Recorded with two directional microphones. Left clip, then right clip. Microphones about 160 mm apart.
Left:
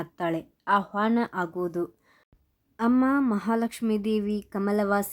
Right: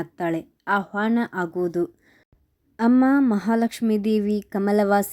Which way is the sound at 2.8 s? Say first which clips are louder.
Right 5 dB; 25° right (ahead or behind).